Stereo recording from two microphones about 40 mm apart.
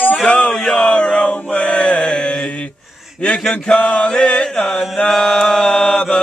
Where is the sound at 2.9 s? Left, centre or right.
Centre.